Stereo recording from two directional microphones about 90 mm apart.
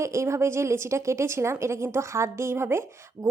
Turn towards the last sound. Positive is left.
turn(degrees=-30)  # may be behind; listen again after turning